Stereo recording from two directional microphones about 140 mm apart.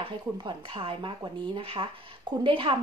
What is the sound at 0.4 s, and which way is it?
Speech, 35° right (ahead or behind).